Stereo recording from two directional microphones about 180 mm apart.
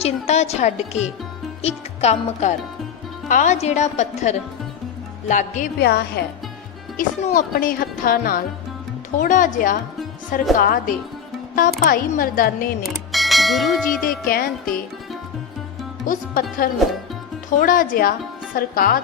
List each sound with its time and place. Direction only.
0.0 s speech: 35° left (ahead or behind)
5.8 s a woman's voice: 60° left (ahead or behind)
7.2 s speech: 35° left (ahead or behind)
7.5 s speech: 50° left (ahead or behind)
12.8 s speech: centre (ahead or behind)
14.0 s speech: 55° left (ahead or behind)
16.0 s speech: 50° left (ahead or behind)